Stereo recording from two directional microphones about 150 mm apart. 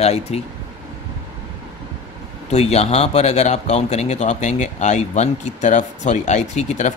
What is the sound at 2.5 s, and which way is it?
Speech, 45° left (ahead or behind).